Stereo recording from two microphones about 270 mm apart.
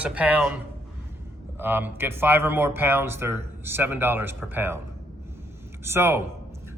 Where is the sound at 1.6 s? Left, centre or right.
Centre.